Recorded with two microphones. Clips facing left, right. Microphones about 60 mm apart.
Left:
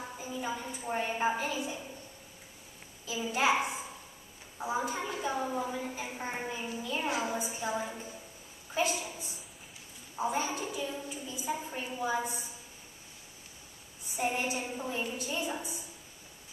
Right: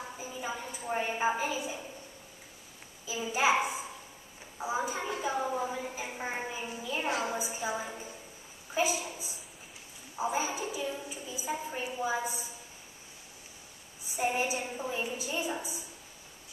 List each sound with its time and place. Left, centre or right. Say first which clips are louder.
0.2 s a woman's voice: left 2 dB; centre
3.1 s a woman's voice: right 1 dB; centre
14.0 s a woman's voice: right 2 dB; centre